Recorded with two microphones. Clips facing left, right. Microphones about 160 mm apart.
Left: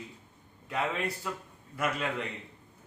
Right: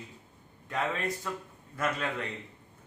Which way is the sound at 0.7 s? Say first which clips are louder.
Even; 10° left (ahead or behind).